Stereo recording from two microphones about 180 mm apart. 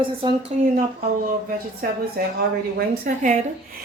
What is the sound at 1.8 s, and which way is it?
Speech, 55° right (ahead or behind).